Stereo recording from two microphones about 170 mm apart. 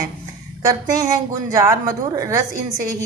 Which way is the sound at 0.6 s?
20° right (ahead or behind).